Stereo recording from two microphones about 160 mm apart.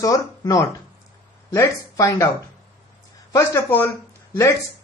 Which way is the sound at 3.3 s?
15° left (ahead or behind).